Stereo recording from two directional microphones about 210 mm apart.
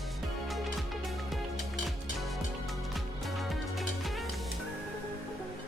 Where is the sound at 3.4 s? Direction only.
Centre (ahead or behind).